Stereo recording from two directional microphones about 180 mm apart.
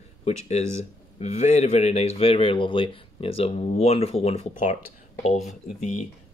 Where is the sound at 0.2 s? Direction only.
40° left (ahead or behind).